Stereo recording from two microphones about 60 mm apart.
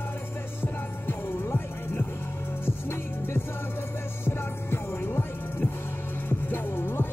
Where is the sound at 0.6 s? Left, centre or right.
Left.